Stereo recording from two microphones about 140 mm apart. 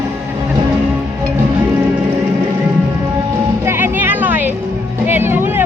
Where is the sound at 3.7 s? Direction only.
15° right (ahead or behind).